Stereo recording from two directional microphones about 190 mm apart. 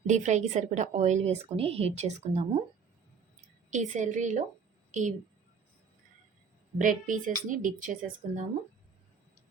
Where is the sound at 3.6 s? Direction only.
40° right (ahead or behind).